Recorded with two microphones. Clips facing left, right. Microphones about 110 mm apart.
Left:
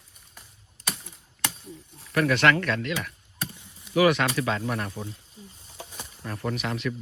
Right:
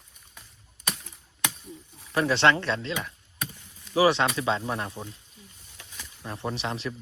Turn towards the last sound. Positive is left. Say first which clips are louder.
# left 2 dB
turn(degrees=-30)  # may be behind; listen again after turning